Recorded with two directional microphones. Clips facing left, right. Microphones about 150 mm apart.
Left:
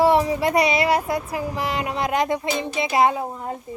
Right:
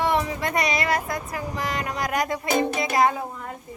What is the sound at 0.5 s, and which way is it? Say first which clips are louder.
Speech: left 4 dB; 30° left (ahead or behind).